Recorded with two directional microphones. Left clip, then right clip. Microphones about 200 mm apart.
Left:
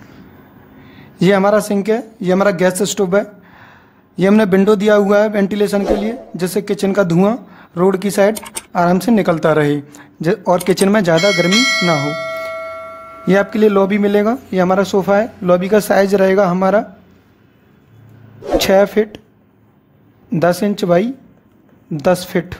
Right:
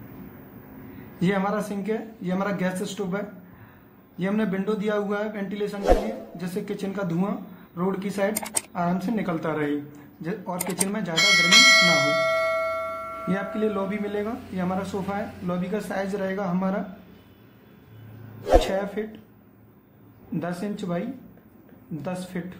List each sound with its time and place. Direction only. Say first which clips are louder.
1.2 s speech: left 14 dB; 60° left (ahead or behind)
11.1 s bell: left 4 dB; centre (ahead or behind)
13.3 s speech: left 16 dB; 55° left (ahead or behind)
18.7 s speech: left 16 dB; 55° left (ahead or behind)
20.3 s speech: left 17 dB; 55° left (ahead or behind)
22.0 s speech: left 19 dB; 55° left (ahead or behind)